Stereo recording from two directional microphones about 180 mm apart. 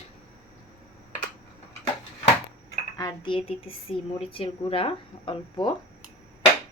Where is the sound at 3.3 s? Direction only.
30° left (ahead or behind).